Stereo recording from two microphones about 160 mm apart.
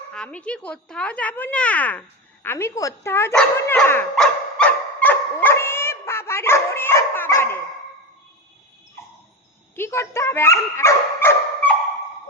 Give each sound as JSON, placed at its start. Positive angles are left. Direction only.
{"t": 0.1, "sound": "speech", "side_deg": 5}
{"t": 3.3, "sound": "dog", "side_deg": 10}
{"t": 9.7, "sound": "speech", "side_deg": 15}